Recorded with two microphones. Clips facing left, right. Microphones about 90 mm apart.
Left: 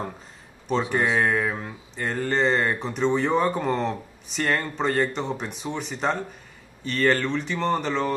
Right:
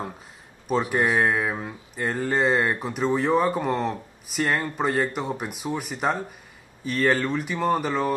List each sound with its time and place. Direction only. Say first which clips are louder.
0.7 s speech: right 1 dB; 10° right (ahead or behind)